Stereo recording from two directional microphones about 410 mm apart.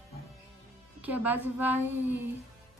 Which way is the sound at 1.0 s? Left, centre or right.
Centre.